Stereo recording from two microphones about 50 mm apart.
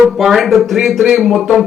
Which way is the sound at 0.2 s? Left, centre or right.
Centre.